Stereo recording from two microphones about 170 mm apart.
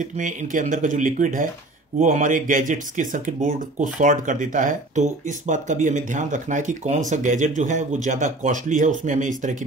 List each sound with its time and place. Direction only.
0.0 s speech: 50° right (ahead or behind)